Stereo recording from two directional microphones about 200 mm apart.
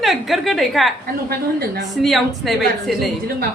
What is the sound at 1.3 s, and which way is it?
Speech, 50° right (ahead or behind).